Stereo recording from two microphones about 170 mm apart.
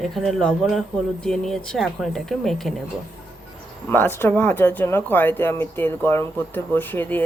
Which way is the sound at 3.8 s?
10° left (ahead or behind).